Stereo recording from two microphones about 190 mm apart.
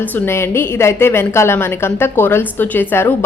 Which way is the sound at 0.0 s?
10° left (ahead or behind).